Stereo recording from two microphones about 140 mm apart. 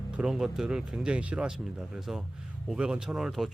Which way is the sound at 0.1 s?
5° right (ahead or behind).